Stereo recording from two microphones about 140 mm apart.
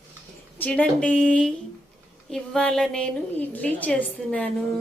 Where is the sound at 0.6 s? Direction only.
10° left (ahead or behind).